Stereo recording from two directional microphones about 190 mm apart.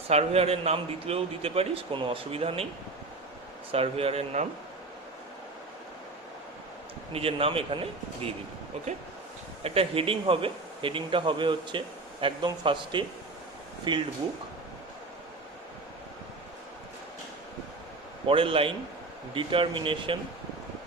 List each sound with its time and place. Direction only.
0.1 s a man's voice: 30° right (ahead or behind)
3.7 s a man's voice: 30° right (ahead or behind)
7.1 s speech: 30° right (ahead or behind)
9.6 s speech: 30° right (ahead or behind)
18.3 s speech: 30° right (ahead or behind)